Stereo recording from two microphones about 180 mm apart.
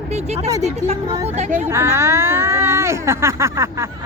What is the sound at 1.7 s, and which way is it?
A woman's voice, 15° right (ahead or behind).